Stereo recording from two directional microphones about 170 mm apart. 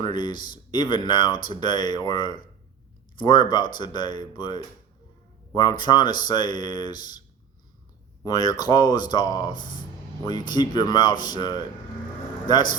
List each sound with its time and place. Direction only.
0.0 s speech: 25° left (ahead or behind)
8.2 s speech: 25° left (ahead or behind)